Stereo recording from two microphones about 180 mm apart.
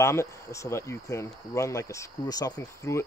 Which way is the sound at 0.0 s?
15° left (ahead or behind).